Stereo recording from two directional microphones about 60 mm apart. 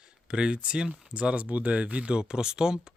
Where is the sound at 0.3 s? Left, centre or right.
Centre.